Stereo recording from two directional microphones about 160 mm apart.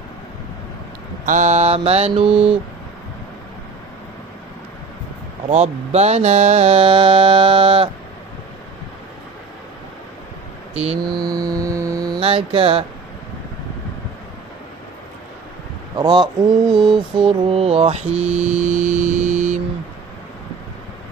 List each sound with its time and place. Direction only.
1.2 s music: 50° right (ahead or behind)
5.5 s mantra: 40° right (ahead or behind)
11.0 s mantra: 25° right (ahead or behind)
12.2 s mantra: 35° right (ahead or behind)
16.0 s speech: 25° right (ahead or behind)
16.7 s a sound: centre (ahead or behind)
17.3 s music: 35° right (ahead or behind)